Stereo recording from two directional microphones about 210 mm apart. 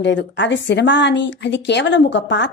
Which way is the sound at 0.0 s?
55° left (ahead or behind).